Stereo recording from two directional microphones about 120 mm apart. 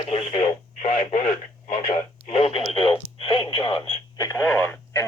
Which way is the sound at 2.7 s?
45° left (ahead or behind).